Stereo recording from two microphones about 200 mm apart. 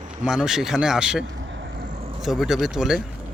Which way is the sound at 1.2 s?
65° right (ahead or behind).